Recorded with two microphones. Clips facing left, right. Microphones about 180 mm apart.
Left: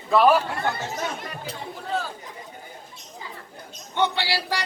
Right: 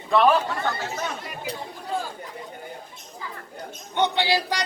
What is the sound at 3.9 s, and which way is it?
Speech, 20° right (ahead or behind).